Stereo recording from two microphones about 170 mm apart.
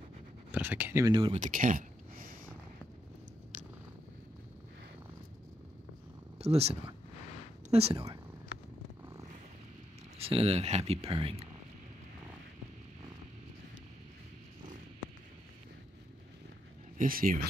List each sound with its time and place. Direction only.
0.5 s speech: 10° right (ahead or behind)
1.1 s speech: 30° right (ahead or behind)
1.4 s a sound: 50° right (ahead or behind)
6.3 s speech: 35° right (ahead or behind)
10.1 s speech: 35° right (ahead or behind)
17.0 s speech: 55° right (ahead or behind)